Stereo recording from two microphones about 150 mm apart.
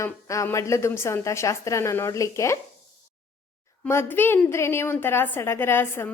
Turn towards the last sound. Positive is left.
turn(degrees=15)  # may be behind; listen again after turning